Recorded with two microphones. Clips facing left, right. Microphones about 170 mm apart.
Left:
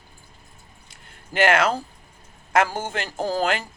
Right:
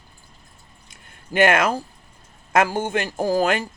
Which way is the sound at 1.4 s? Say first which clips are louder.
Right 2 dB; 20° right (ahead or behind).